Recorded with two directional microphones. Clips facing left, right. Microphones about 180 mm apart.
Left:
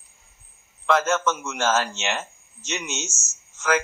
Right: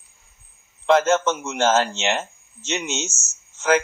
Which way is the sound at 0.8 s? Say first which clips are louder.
Right 4 dB; 25° right (ahead or behind).